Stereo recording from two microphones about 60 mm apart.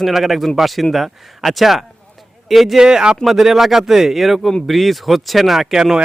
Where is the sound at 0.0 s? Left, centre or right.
Centre.